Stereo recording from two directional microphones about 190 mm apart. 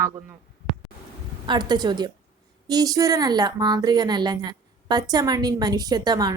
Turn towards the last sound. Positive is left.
turn(degrees=-20)  # may be behind; listen again after turning